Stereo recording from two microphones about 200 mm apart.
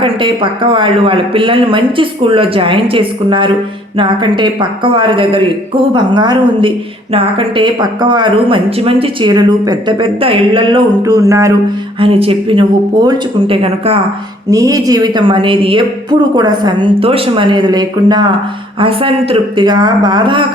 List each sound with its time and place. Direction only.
0.0 s a woman's voice: 25° right (ahead or behind)
11.9 s a woman's voice: 30° right (ahead or behind)
14.5 s a woman's voice: 15° right (ahead or behind)